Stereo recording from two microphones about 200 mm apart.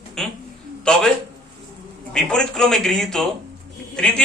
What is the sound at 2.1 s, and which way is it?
A man's voice, 5° left (ahead or behind).